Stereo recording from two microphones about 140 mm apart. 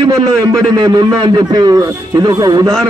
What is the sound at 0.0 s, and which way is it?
A man's voice, 30° right (ahead or behind).